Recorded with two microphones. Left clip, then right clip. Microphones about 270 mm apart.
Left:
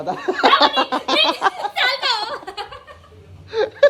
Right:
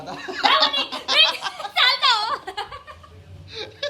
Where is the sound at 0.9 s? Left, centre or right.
Right.